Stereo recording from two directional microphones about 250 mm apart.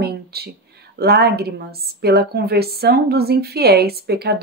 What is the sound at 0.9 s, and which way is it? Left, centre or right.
A woman's voice, right.